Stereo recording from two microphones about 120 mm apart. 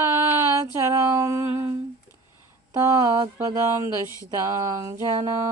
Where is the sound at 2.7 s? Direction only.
30° right (ahead or behind).